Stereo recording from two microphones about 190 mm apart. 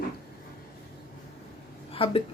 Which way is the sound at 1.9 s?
30° left (ahead or behind).